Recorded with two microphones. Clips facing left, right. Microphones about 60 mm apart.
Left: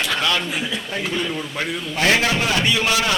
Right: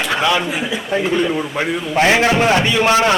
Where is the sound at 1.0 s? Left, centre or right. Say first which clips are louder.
Right 7 dB; centre; by 3.1 s right.